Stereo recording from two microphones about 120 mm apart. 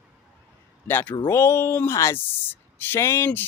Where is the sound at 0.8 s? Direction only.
15° left (ahead or behind).